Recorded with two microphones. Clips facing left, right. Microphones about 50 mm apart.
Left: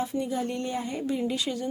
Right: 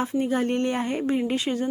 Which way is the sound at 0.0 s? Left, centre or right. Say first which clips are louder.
Right 5 dB; right.